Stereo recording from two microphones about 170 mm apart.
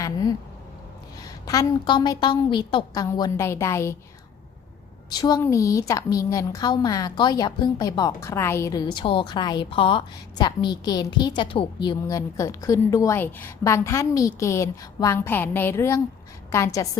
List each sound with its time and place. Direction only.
0.0 s a sound: 20° left (ahead or behind)
1.2 s a woman's voice: 20° left (ahead or behind)
5.0 s a woman's voice: 25° left (ahead or behind)